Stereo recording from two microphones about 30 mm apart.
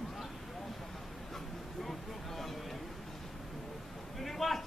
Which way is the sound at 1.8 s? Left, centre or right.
Centre.